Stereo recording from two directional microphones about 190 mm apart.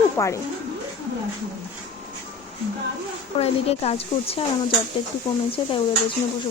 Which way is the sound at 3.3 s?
30° left (ahead or behind).